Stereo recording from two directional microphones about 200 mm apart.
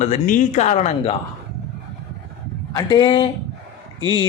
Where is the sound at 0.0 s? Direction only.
40° left (ahead or behind).